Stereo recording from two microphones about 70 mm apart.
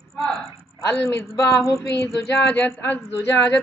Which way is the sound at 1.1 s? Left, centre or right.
Left.